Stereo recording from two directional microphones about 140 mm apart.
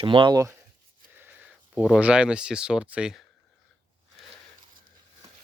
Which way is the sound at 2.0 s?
10° right (ahead or behind).